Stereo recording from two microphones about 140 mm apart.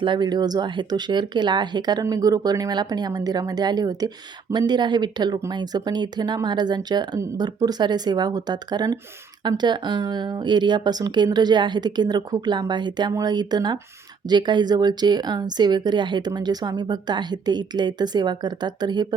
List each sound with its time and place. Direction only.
0.0 s a woman's voice: 35° right (ahead or behind)